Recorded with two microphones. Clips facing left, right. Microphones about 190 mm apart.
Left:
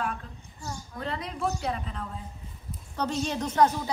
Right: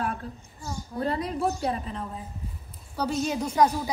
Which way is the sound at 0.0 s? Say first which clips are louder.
Right 2 dB; 40° right (ahead or behind).